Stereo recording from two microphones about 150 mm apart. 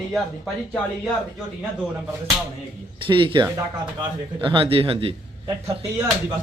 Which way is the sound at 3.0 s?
35° right (ahead or behind).